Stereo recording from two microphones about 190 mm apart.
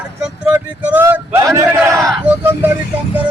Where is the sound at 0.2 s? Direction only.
10° right (ahead or behind).